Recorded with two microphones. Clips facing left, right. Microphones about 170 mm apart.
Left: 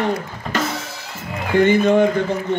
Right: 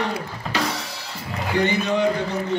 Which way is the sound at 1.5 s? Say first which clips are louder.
Left 7 dB; 50° left (ahead or behind).